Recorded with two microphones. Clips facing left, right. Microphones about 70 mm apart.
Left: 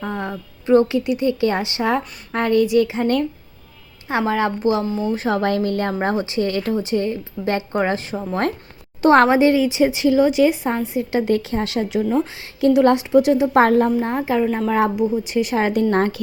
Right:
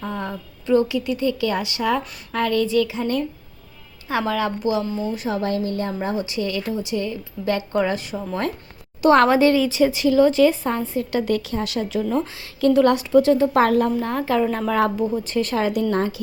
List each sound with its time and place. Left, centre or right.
0.0 s a sound: left
0.7 s speech: left
3.0 s speech: left
4.1 s a woman's voice: left
5.3 s a woman's voice: left
6.2 s a woman's voice: left
9.0 s speech: left
12.0 s speech: centre
13.5 s speech: left
14.2 s speech: centre
14.9 s speech: centre
15.6 s speech: left